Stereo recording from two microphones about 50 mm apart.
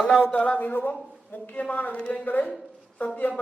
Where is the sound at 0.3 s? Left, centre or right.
Left.